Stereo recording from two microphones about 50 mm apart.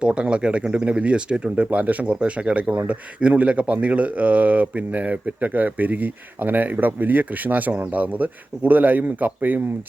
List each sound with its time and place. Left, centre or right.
0.0 s speech: right